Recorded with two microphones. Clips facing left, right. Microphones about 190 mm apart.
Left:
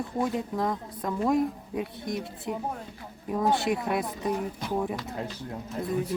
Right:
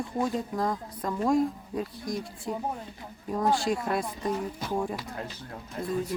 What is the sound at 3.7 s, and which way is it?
Speech, 5° left (ahead or behind).